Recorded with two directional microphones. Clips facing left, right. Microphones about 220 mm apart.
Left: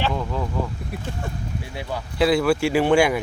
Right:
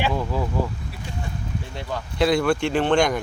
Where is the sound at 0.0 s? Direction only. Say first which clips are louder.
Right 1 dB; 5° right (ahead or behind).